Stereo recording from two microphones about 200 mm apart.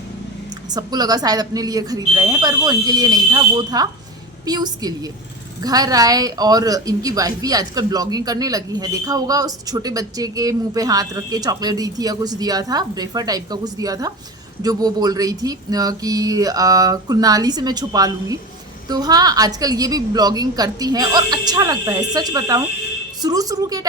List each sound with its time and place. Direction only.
0.7 s a woman's voice: 20° right (ahead or behind)